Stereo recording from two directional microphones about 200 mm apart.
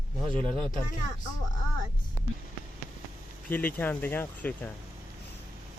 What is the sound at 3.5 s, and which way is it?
Speech, 10° left (ahead or behind).